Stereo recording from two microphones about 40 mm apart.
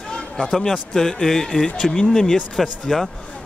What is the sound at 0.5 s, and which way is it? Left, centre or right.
A man's voice, centre.